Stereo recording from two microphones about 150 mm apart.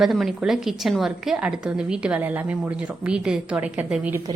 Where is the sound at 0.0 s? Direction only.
Centre (ahead or behind).